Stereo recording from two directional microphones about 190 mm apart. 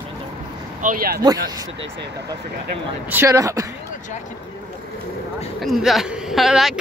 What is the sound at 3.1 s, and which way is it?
Speech, 15° right (ahead or behind).